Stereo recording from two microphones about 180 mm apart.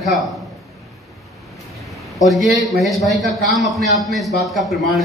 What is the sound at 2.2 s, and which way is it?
A man's voice, centre (ahead or behind).